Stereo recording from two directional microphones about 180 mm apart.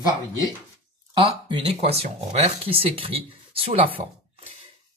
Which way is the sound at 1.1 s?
25° right (ahead or behind).